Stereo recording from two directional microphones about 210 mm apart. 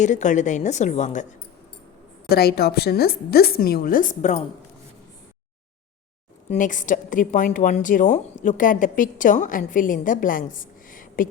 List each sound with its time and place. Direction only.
0.0 s a woman's voice: 35° left (ahead or behind)
2.3 s a woman's voice: 50° left (ahead or behind)
6.5 s a woman's voice: 40° left (ahead or behind)